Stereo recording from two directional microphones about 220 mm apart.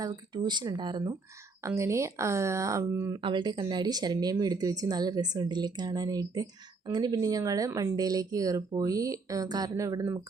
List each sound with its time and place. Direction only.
0.0 s speech: 20° right (ahead or behind)